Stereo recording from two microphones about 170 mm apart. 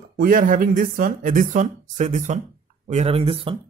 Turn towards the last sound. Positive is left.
turn(degrees=-35)  # may be behind; listen again after turning